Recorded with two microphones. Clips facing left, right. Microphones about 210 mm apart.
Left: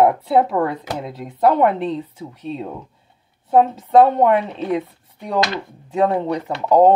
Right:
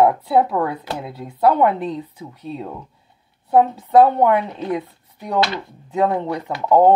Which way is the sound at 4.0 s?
30° left (ahead or behind).